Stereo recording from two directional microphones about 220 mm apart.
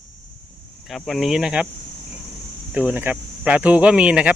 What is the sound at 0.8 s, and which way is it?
Speech, centre (ahead or behind).